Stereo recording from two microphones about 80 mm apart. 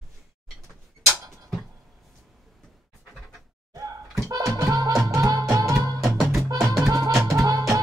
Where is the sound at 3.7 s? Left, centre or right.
Right.